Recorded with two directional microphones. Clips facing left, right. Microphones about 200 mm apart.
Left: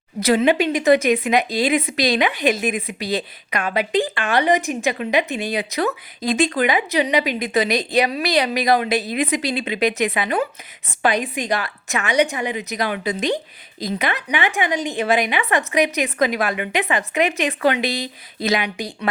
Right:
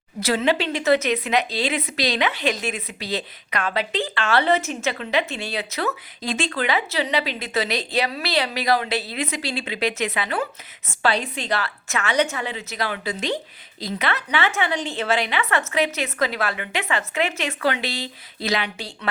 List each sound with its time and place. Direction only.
0.2 s a woman's voice: 15° left (ahead or behind)